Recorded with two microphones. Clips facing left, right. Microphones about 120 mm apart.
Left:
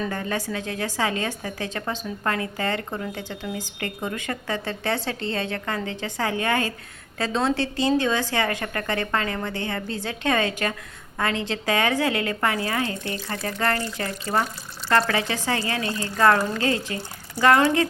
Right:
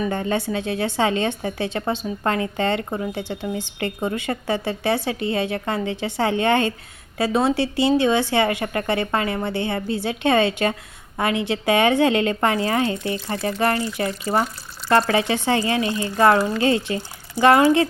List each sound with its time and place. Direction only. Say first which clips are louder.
0.0 s a woman's voice: right 5 dB; 20° right (ahead or behind)
7.2 s a woman's voice: right 4 dB; 10° right (ahead or behind)